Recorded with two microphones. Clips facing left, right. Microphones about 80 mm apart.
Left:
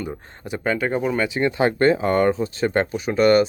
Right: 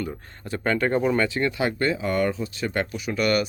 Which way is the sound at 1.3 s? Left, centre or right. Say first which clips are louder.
Left 5 dB; left.